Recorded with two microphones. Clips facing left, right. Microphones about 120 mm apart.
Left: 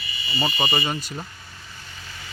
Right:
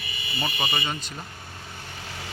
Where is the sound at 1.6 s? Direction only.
55° right (ahead or behind).